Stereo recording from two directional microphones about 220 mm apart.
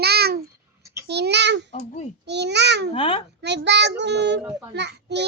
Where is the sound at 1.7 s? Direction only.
30° left (ahead or behind).